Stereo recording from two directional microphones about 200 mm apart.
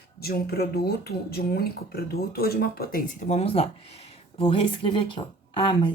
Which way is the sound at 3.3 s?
30° left (ahead or behind).